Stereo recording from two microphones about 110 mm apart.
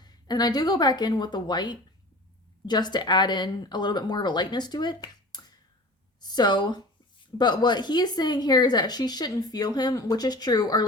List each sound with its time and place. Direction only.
0.0 s speech: 40° left (ahead or behind)